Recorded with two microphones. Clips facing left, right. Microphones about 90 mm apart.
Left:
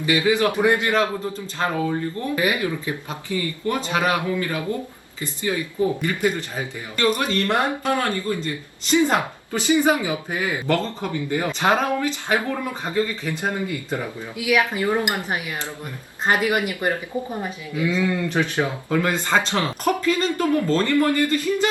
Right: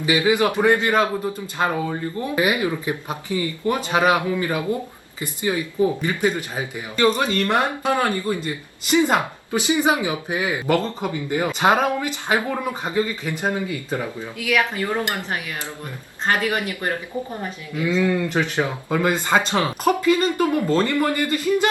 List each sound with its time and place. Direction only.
0.0 s speech: 15° right (ahead or behind)
14.3 s speech: 15° left (ahead or behind)
18.0 s speech: 15° right (ahead or behind)